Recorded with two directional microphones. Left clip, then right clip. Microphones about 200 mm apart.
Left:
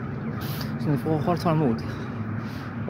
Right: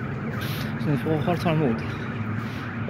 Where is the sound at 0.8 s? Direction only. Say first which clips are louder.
Even; 15° left (ahead or behind).